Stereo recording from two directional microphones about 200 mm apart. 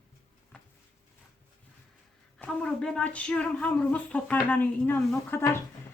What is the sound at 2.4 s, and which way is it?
Speech, 5° left (ahead or behind).